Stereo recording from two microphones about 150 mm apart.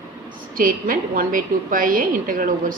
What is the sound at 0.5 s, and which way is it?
A woman's voice, 65° right (ahead or behind).